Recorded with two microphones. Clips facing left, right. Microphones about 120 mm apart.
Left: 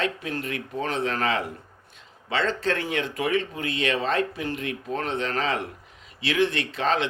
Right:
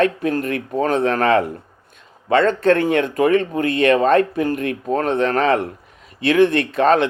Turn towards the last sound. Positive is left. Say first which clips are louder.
# right 10 dB
turn(degrees=-55)  # may be behind; listen again after turning